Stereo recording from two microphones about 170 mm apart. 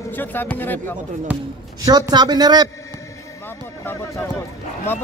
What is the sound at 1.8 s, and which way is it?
Speech, 20° right (ahead or behind).